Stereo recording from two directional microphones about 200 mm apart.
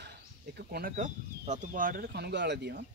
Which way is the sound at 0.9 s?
40° right (ahead or behind).